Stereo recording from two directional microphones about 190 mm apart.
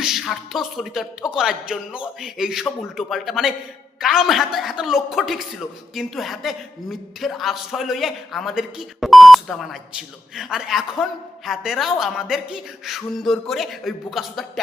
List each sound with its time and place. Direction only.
0.0 s a man's voice: centre (ahead or behind)